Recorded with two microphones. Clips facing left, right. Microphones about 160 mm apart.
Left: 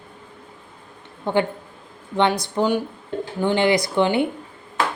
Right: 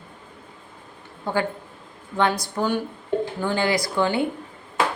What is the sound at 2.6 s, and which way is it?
Speech, 15° left (ahead or behind).